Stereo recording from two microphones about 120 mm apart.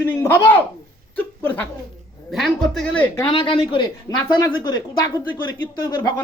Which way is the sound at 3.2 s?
40° left (ahead or behind).